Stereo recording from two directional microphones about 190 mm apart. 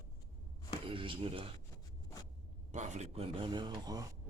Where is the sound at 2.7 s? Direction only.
40° right (ahead or behind); by 4.1 s 20° right (ahead or behind).